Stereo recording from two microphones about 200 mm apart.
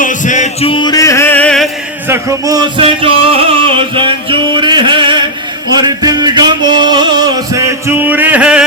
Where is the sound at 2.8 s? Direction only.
30° right (ahead or behind); by 8.6 s 5° right (ahead or behind).